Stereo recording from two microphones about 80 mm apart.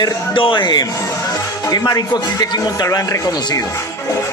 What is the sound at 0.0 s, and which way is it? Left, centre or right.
Speech, left.